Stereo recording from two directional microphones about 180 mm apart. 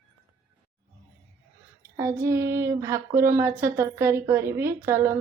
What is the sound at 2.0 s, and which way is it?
A woman's voice, 15° right (ahead or behind).